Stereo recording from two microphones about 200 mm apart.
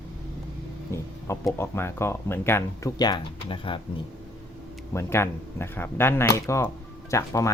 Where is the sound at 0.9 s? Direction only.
15° left (ahead or behind).